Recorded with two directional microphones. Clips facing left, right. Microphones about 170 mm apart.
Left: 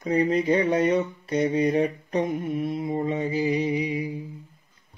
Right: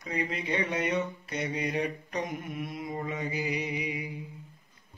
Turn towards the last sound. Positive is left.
turn(degrees=30)  # may be behind; listen again after turning